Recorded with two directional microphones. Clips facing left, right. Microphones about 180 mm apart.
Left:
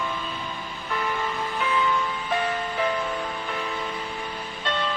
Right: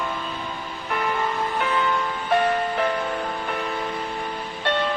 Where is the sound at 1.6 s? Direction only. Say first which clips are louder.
Left 1 dB; 65° right (ahead or behind).